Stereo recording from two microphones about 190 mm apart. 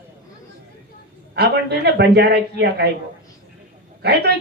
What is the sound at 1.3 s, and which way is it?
A woman's voice, 60° right (ahead or behind).